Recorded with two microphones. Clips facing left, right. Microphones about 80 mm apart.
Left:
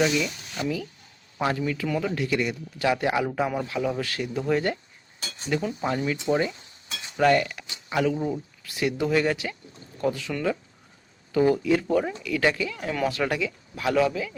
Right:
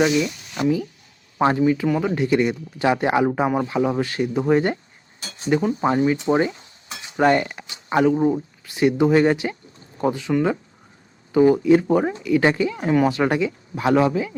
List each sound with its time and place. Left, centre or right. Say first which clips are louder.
0.0 s speech: right 5 dB; centre
1.4 s speech: right 8 dB; right